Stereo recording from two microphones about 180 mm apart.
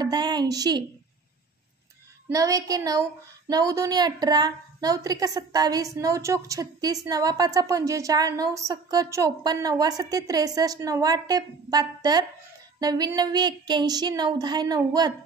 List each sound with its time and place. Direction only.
0.0 s a woman's voice: 25° right (ahead or behind)
2.2 s a woman's voice: 20° right (ahead or behind)